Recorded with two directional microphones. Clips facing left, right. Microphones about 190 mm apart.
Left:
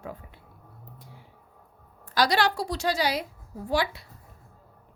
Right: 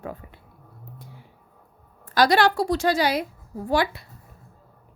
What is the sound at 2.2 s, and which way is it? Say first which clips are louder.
A woman's voice: right 5 dB; 55° right (ahead or behind).